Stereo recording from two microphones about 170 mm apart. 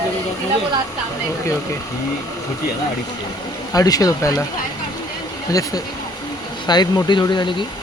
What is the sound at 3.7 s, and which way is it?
Speech, 20° left (ahead or behind).